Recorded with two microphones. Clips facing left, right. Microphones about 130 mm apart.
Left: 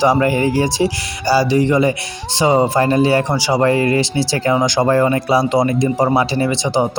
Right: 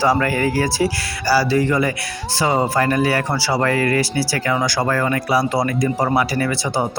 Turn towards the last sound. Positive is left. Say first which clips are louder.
# left 4 dB
turn(degrees=20)  # may be behind; listen again after turning